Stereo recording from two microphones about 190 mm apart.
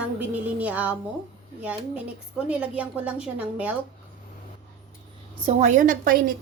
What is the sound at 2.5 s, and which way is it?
A woman's voice, 5° right (ahead or behind).